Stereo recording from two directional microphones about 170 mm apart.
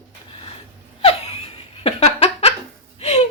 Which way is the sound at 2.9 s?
40° left (ahead or behind).